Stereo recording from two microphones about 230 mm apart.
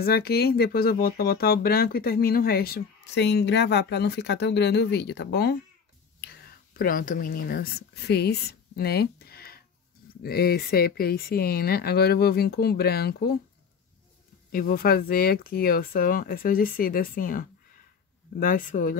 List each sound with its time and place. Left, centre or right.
0.0 s speech: left
14.5 s speech: left